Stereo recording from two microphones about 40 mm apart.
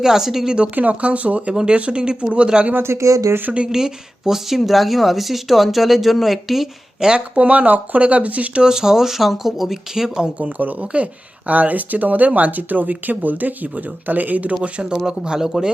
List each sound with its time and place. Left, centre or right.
0.0 s speech: centre
0.8 s speech: right
2.7 s speech: right
3.7 s speech: centre
7.3 s speech: right
8.6 s speech: centre
10.3 s speech: right
14.6 s speech: right